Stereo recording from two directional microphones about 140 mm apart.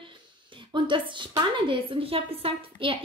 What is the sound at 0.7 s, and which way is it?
A woman's voice, 35° right (ahead or behind).